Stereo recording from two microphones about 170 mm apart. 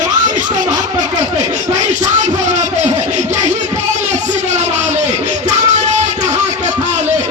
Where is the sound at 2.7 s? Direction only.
45° right (ahead or behind).